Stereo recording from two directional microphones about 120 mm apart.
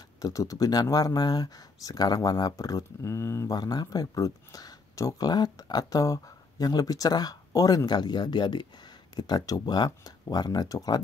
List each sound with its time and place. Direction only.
0.2 s speech: 25° left (ahead or behind)